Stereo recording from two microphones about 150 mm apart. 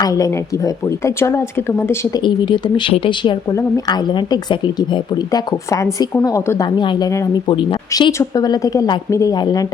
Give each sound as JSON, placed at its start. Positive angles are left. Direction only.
{"t": 0.0, "sound": "speech", "side_deg": 20}
{"t": 2.2, "sound": "speech", "side_deg": 30}
{"t": 7.5, "sound": "speech", "side_deg": 35}